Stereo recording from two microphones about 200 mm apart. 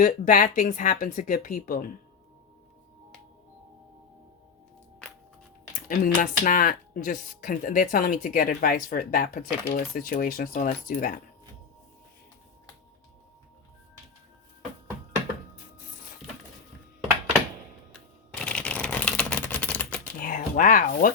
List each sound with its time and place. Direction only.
0.1 s speech: 40° left (ahead or behind)
5.9 s speech: 40° left (ahead or behind)
18.4 s typing: 5° left (ahead or behind)
20.1 s a sound: 45° left (ahead or behind)